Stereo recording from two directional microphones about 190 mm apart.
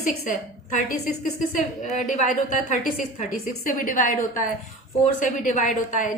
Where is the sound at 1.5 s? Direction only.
40° left (ahead or behind).